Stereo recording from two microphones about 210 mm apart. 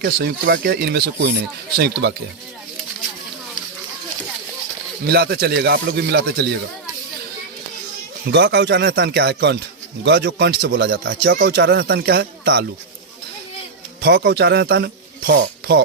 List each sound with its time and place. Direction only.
0.0 s speech: 50° right (ahead or behind)
5.0 s speech: 50° right (ahead or behind)
8.3 s speech: 55° right (ahead or behind)
14.0 s speech: 60° right (ahead or behind)